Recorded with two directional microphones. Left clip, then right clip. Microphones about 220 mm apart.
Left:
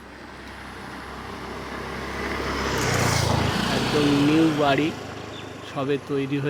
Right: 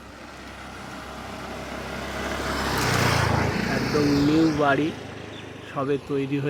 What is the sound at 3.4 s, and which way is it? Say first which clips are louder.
Vehicle: left 2 dB; 25° left (ahead or behind).